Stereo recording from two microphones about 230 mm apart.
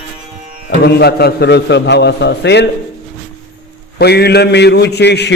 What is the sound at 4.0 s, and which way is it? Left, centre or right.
A man's voice, left.